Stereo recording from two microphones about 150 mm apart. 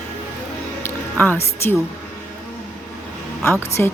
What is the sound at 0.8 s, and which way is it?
Speech, 15° left (ahead or behind).